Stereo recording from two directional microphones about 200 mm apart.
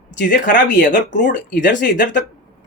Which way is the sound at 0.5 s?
40° left (ahead or behind).